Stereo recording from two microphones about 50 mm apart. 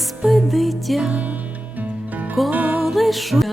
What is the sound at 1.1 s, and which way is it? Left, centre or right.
Music, right.